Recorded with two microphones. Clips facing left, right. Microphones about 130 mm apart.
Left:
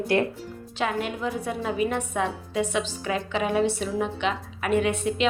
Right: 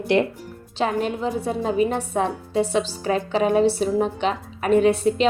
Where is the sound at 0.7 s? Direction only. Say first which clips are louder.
Right 5 dB; 30° right (ahead or behind).